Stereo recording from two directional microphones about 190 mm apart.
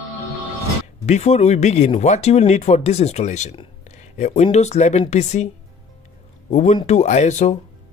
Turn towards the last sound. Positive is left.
turn(degrees=40)  # may be behind; listen again after turning